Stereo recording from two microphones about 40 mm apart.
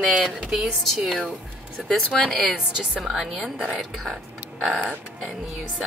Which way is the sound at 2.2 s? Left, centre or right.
Centre.